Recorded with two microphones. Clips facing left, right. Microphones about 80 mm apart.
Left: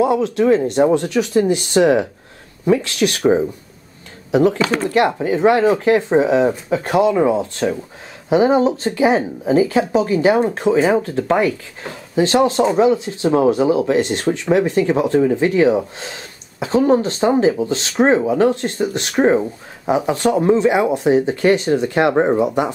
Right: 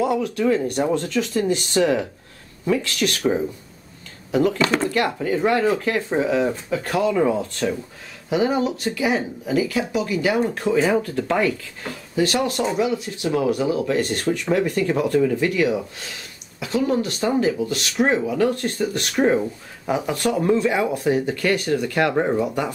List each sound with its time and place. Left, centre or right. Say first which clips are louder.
0.0 s speech: left 5 dB; left
4.3 s speech: left 4 dB; left